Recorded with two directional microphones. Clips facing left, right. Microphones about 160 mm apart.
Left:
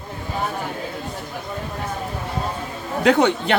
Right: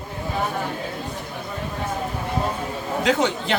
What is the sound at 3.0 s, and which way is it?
Speech, 60° left (ahead or behind).